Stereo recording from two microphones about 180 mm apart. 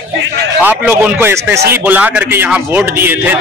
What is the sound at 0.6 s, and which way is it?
A man's voice, 10° right (ahead or behind).